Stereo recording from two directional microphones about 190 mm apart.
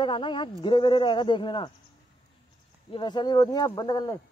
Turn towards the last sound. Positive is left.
turn(degrees=20)  # may be behind; listen again after turning